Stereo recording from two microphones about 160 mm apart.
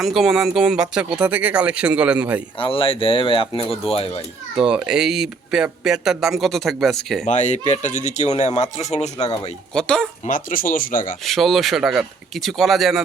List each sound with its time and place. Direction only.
0.0 s speech: centre (ahead or behind)
2.6 s speech: 35° left (ahead or behind)
4.5 s speech: 5° right (ahead or behind)
7.3 s speech: 45° left (ahead or behind)
9.7 s speech: 5° left (ahead or behind)
10.2 s speech: 55° left (ahead or behind)
11.3 s speech: centre (ahead or behind)